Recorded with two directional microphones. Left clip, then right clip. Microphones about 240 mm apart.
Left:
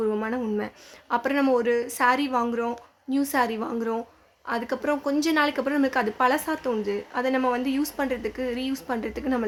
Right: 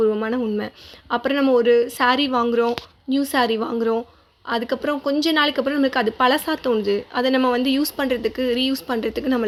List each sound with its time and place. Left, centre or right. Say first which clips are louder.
0.0 s speech: right 6 dB; centre